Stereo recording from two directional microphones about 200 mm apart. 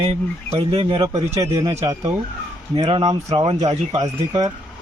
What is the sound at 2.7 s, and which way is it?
Speech, 30° right (ahead or behind).